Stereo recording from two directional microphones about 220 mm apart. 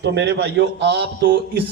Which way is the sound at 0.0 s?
50° right (ahead or behind).